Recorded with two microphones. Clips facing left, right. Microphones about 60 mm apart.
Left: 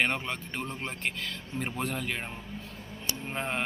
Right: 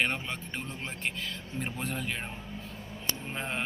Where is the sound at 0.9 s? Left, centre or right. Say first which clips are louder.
Left 1 dB; left.